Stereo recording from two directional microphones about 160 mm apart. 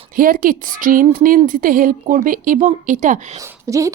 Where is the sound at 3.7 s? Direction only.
20° right (ahead or behind).